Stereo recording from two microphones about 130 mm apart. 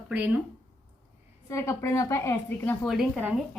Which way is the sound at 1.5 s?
25° left (ahead or behind).